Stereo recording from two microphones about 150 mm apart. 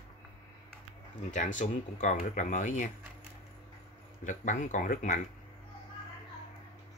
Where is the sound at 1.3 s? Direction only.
55° left (ahead or behind).